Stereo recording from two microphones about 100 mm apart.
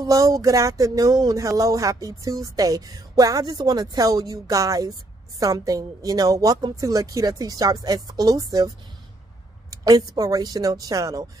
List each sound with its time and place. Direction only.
0.0 s speech: 35° right (ahead or behind)